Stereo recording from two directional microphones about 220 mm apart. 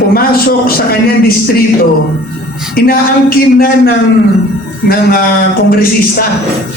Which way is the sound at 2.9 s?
40° left (ahead or behind).